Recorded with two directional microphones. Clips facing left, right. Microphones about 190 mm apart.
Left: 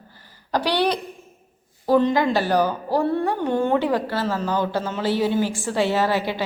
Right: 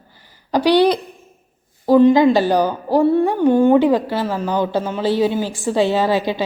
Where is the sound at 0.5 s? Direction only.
15° right (ahead or behind).